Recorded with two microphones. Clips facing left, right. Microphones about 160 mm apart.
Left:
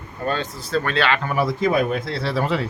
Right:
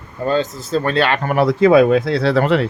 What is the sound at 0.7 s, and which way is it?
Speech, 30° right (ahead or behind).